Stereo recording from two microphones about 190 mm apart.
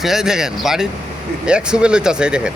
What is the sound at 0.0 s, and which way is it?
Speech, centre (ahead or behind).